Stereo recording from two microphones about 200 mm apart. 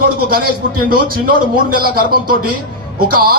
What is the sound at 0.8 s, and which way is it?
A man's voice, 45° right (ahead or behind).